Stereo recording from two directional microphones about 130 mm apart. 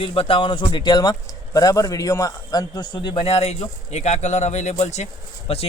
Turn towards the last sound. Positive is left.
turn(degrees=55)  # may be behind; listen again after turning